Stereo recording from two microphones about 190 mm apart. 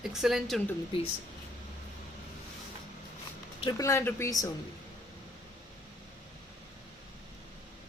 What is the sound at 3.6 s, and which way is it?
Speech, 20° left (ahead or behind).